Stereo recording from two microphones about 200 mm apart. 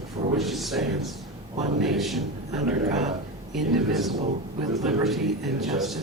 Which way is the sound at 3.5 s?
Centre (ahead or behind).